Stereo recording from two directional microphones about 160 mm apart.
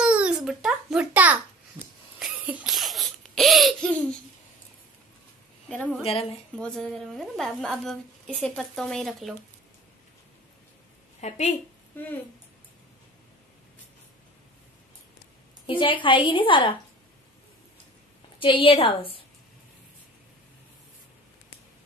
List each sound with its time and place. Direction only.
0.0 s babbling: 5° right (ahead or behind)
2.1 s laughter: 5° right (ahead or behind)
5.7 s a woman's voice: 10° left (ahead or behind)
6.0 s a woman's voice: 40° left (ahead or behind)
6.5 s a woman's voice: 5° left (ahead or behind)
11.1 s a woman's voice: 45° left (ahead or behind)
11.9 s speech: 10° left (ahead or behind)
15.6 s a woman's voice: 30° left (ahead or behind)
18.4 s a woman's voice: 35° left (ahead or behind)